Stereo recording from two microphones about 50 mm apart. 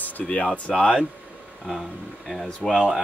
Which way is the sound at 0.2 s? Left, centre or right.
Left.